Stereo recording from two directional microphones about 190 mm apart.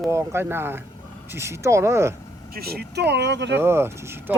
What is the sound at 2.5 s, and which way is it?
Speech, 55° right (ahead or behind).